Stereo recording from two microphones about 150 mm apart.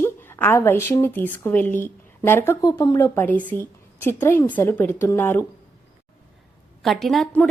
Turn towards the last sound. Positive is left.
turn(degrees=5)  # may be behind; listen again after turning